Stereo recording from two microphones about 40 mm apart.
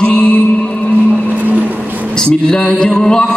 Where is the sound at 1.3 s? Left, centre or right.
Right.